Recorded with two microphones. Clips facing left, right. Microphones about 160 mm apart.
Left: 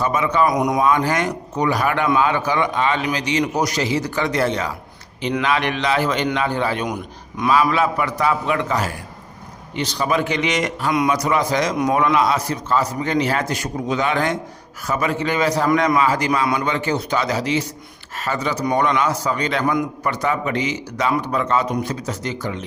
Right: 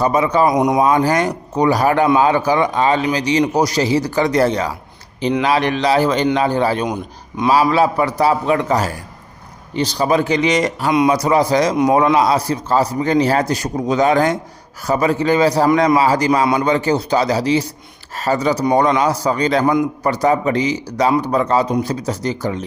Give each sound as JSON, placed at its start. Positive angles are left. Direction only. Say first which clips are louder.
{"t": 0.0, "sound": "speech", "louder": "right 4 dB", "side_deg": -35}
{"t": 0.5, "sound": "speech", "louder": "right 4 dB", "side_deg": -25}
{"t": 6.8, "sound": "speech", "louder": "right 4 dB", "side_deg": -25}